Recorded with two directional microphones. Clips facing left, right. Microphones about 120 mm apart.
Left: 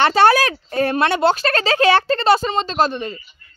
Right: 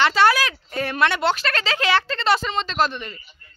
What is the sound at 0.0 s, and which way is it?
Speech, 50° left (ahead or behind).